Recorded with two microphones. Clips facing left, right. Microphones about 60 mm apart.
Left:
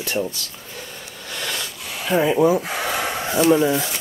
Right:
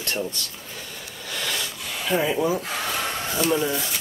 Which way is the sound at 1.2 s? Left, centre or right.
Centre.